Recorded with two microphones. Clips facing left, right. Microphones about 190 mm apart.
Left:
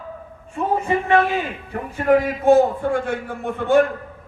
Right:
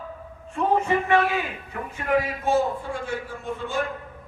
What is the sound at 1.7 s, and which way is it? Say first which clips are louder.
A man's voice: left 8 dB; 45° left (ahead or behind).